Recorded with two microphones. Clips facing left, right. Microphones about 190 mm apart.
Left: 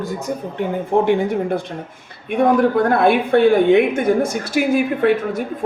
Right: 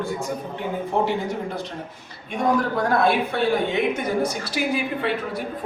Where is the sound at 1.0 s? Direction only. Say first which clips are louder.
Left 8 dB; 55° left (ahead or behind).